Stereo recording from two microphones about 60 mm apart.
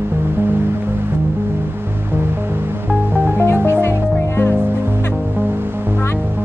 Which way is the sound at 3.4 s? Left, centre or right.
Left.